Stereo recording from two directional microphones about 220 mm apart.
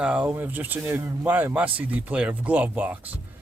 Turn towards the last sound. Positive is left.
turn(degrees=-5)  # may be behind; listen again after turning